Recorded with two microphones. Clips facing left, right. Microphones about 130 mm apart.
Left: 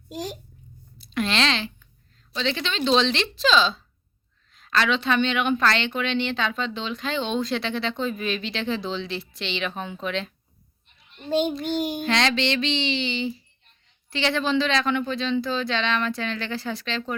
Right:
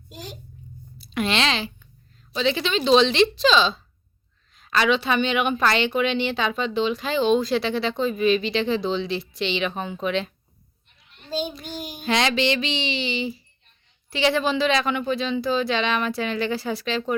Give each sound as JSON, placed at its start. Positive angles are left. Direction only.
{"t": 0.9, "sound": "a woman's voice", "side_deg": -5}
{"t": 11.3, "sound": "a child's voice", "side_deg": 65}
{"t": 12.0, "sound": "a woman's voice", "side_deg": -10}